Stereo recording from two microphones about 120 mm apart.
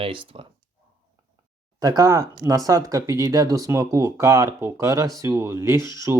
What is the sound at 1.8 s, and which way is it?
Speech, 30° right (ahead or behind).